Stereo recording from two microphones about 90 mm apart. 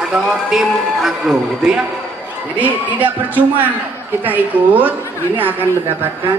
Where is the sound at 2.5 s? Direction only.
20° right (ahead or behind).